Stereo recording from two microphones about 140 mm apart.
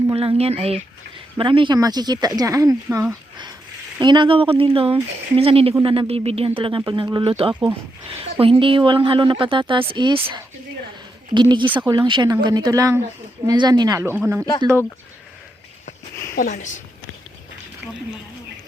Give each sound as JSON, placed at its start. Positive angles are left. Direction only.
{"t": 0.1, "sound": "speech", "side_deg": -40}
{"t": 4.0, "sound": "a woman's voice", "side_deg": -35}
{"t": 11.3, "sound": "a woman's voice", "side_deg": -35}
{"t": 15.9, "sound": "a sound", "side_deg": 65}